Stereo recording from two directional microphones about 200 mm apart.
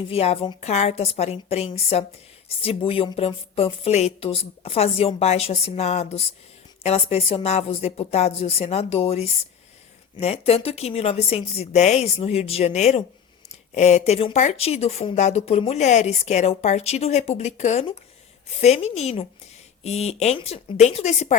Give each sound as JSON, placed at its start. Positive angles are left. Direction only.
{"t": 0.1, "sound": "a woman's voice", "side_deg": 30}